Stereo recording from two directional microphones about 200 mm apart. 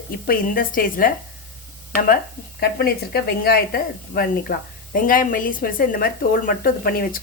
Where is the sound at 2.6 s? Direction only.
50° left (ahead or behind).